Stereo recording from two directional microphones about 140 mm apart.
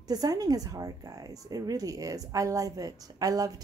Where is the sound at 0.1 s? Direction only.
25° right (ahead or behind).